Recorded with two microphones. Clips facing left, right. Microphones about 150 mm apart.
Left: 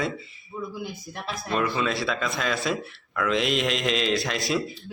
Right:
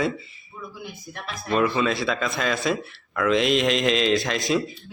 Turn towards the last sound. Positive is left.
turn(degrees=0)  # may be behind; listen again after turning